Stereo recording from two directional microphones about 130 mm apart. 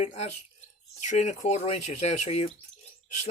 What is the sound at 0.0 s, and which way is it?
Speech, 55° left (ahead or behind).